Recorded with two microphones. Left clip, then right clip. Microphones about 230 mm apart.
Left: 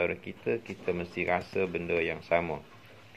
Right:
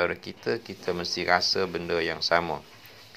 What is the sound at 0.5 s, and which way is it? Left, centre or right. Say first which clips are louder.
Speech: right 2 dB; centre.